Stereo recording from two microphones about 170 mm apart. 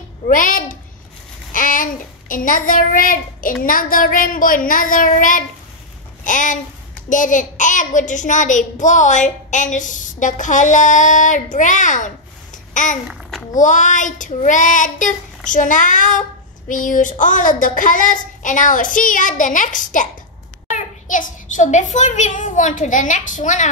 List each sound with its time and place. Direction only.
0.3 s babbling: 50° left (ahead or behind)
1.5 s child singing: 55° left (ahead or behind)
12.7 s babbling: 50° left (ahead or behind)
13.6 s child singing: 45° left (ahead or behind)
20.6 s a child's voice: 50° left (ahead or behind)